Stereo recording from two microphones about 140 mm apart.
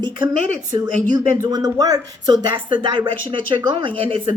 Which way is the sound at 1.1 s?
30° right (ahead or behind).